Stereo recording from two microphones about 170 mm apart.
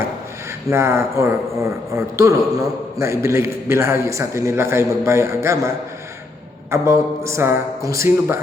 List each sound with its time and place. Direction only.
0.7 s a man's voice: 15° right (ahead or behind)